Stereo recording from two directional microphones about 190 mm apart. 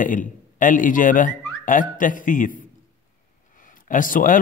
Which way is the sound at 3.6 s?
45° left (ahead or behind).